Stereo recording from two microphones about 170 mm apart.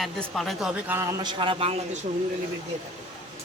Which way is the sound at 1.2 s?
25° right (ahead or behind).